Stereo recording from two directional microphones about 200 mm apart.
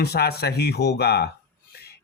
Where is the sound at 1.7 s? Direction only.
50° left (ahead or behind).